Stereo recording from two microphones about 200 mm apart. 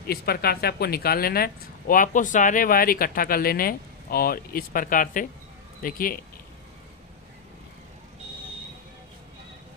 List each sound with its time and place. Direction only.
0.0 s speech: 50° left (ahead or behind)